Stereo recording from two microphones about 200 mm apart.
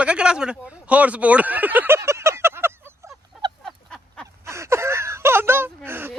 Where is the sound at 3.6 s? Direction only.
5° left (ahead or behind).